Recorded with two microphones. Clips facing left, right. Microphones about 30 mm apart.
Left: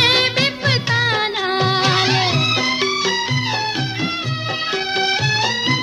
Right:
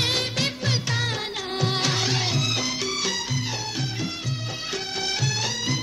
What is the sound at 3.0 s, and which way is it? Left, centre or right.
Music, left.